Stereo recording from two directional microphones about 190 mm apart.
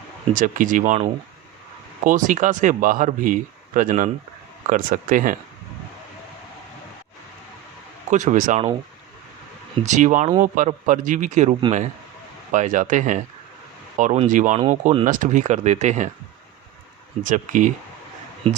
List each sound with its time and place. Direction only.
0.3 s speech: 45° right (ahead or behind)
2.0 s speech: 45° right (ahead or behind)
8.1 s speech: 40° right (ahead or behind)
9.8 s speech: 40° right (ahead or behind)
17.2 s speech: 45° right (ahead or behind)